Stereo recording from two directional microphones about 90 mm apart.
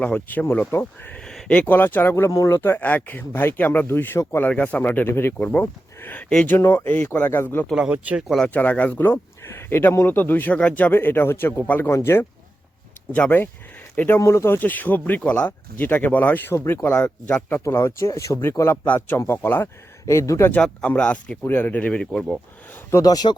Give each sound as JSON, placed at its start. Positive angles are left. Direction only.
{"t": 0.0, "sound": "speech", "side_deg": 20}
{"t": 1.2, "sound": "speech", "side_deg": 5}
{"t": 4.5, "sound": "speech", "side_deg": 15}
{"t": 5.4, "sound": "speech", "side_deg": 15}
{"t": 6.6, "sound": "speech", "side_deg": 30}
{"t": 7.8, "sound": "speech", "side_deg": -15}
{"t": 8.4, "sound": "speech", "side_deg": 15}
{"t": 14.2, "sound": "speech", "side_deg": 30}
{"t": 17.6, "sound": "speech", "side_deg": 30}
{"t": 20.5, "sound": "speech", "side_deg": 15}
{"t": 22.0, "sound": "speech", "side_deg": 5}
{"t": 22.7, "sound": "speech", "side_deg": 30}
{"t": 23.0, "sound": "speech", "side_deg": 50}